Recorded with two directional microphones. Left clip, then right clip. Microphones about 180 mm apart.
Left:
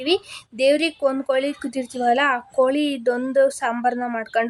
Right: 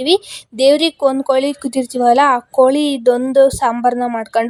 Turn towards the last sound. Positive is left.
turn(degrees=-25)  # may be behind; listen again after turning